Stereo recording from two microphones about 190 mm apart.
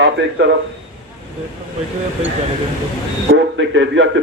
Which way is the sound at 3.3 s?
70° right (ahead or behind).